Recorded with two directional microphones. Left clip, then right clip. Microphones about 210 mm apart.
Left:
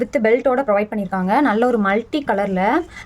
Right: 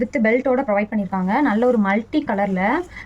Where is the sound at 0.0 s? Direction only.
55° left (ahead or behind).